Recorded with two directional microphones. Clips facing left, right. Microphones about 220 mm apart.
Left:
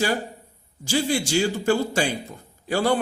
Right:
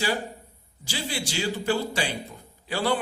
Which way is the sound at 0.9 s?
45° left (ahead or behind).